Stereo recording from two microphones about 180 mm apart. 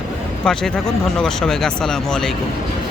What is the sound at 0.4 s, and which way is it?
Speech, 5° left (ahead or behind).